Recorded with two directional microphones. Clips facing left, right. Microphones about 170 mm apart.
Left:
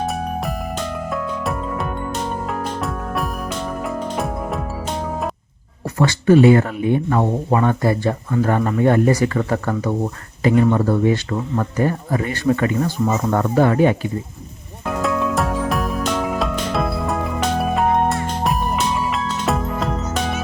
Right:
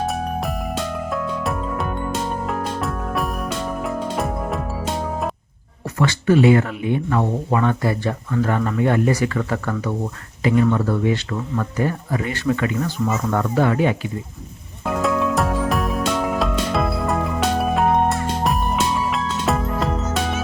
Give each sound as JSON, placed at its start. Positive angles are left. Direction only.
{"t": 0.0, "sound": "music", "side_deg": 0}
{"t": 6.0, "sound": "speech", "side_deg": 40}
{"t": 14.8, "sound": "music", "side_deg": 0}